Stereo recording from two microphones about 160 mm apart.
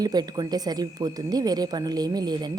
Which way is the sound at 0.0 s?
25° right (ahead or behind).